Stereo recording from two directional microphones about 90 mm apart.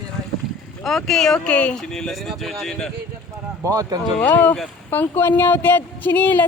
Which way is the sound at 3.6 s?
40° right (ahead or behind).